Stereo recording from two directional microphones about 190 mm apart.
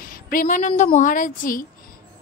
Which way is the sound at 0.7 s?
35° left (ahead or behind).